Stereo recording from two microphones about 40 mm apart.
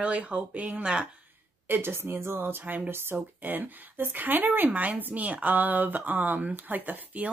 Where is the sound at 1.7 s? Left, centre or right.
Right.